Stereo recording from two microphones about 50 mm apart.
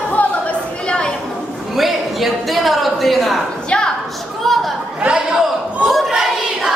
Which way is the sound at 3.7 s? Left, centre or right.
Left.